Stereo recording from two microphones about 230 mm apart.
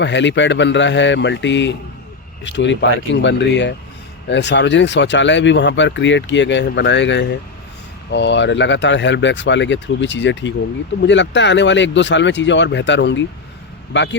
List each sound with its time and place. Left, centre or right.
0.0 s speech: left